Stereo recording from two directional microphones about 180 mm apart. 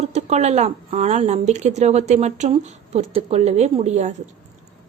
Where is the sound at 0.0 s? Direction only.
40° right (ahead or behind).